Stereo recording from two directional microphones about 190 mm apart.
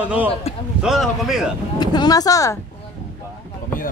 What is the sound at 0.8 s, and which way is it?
Speech, centre (ahead or behind).